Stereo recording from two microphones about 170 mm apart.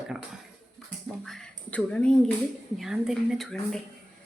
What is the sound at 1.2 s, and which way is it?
Speech, 5° left (ahead or behind).